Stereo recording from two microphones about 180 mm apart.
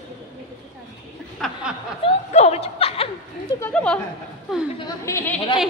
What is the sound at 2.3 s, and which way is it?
Speech, 35° left (ahead or behind).